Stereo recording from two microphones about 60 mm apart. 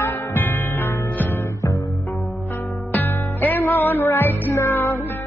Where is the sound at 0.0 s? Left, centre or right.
Left.